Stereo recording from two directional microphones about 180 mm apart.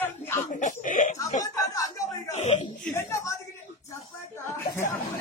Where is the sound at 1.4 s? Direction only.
20° left (ahead or behind).